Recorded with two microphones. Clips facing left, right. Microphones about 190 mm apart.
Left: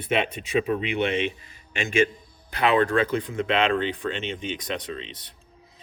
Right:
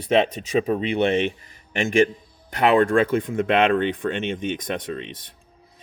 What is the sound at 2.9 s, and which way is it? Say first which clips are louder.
Speech: right 4 dB; 50° right (ahead or behind).